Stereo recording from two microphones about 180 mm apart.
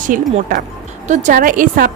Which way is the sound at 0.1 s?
50° right (ahead or behind).